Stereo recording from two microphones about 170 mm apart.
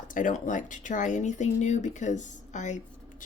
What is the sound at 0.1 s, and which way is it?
Speech, 50° left (ahead or behind).